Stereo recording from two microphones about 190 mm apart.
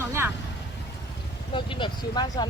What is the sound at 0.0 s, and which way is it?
Vehicle, 10° right (ahead or behind).